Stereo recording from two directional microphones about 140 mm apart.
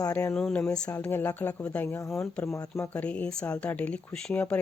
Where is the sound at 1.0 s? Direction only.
15° left (ahead or behind).